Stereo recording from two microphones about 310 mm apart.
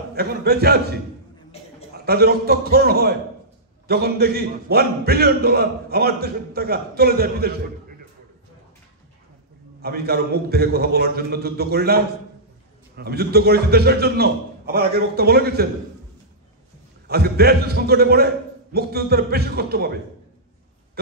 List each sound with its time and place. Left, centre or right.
0.1 s a man's voice: right
2.0 s a man's voice: right
9.8 s a man's voice: right
17.1 s a man's voice: right